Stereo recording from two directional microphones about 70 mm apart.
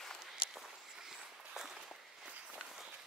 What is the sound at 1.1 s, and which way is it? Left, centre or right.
Walk, centre.